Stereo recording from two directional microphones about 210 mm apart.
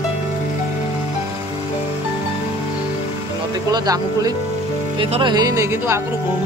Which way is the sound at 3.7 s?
15° right (ahead or behind).